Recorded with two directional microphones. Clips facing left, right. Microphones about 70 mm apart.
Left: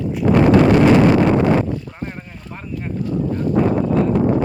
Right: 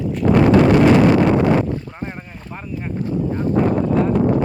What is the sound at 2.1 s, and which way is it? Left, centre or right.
Speech, centre.